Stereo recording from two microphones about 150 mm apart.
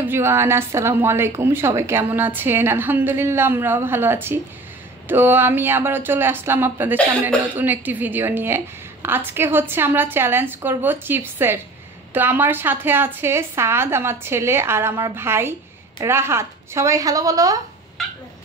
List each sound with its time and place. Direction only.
0.1 s a woman's voice: 15° right (ahead or behind)
18.0 s cat: centre (ahead or behind)